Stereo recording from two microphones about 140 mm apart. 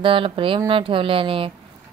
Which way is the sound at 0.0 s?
40° right (ahead or behind).